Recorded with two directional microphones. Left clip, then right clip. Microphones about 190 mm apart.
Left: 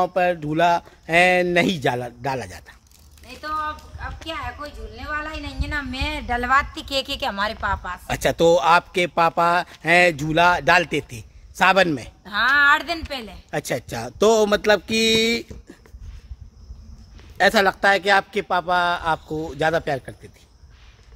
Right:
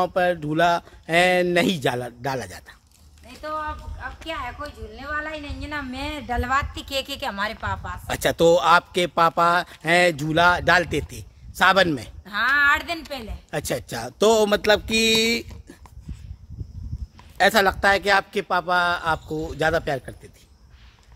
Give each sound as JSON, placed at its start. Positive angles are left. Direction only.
{"t": 0.0, "sound": "speech", "side_deg": -5}
{"t": 3.3, "sound": "speech", "side_deg": 5}
{"t": 8.1, "sound": "speech", "side_deg": -10}
{"t": 12.3, "sound": "a sound", "side_deg": 20}
{"t": 13.1, "sound": "speech", "side_deg": 10}
{"t": 13.5, "sound": "speech", "side_deg": -5}
{"t": 17.4, "sound": "speech", "side_deg": -10}